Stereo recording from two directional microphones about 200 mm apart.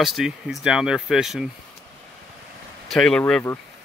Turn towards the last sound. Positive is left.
turn(degrees=10)  # may be behind; listen again after turning